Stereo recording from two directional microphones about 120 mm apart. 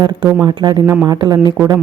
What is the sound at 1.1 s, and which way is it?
Speech, 35° right (ahead or behind).